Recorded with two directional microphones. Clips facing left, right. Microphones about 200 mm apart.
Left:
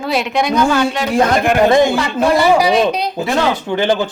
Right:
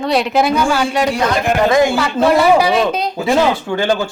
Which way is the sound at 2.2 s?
5° right (ahead or behind).